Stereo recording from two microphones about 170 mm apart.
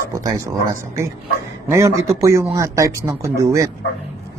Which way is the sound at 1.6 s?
15° right (ahead or behind).